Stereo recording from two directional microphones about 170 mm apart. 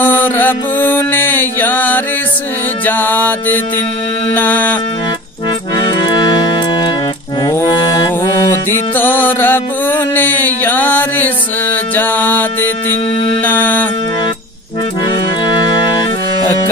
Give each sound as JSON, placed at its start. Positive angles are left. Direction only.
{"t": 0.0, "sound": "mantra", "side_deg": 10}
{"t": 2.8, "sound": "music", "side_deg": 10}
{"t": 7.4, "sound": "music", "side_deg": 25}